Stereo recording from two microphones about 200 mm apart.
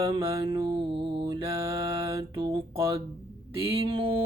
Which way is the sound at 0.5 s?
25° right (ahead or behind).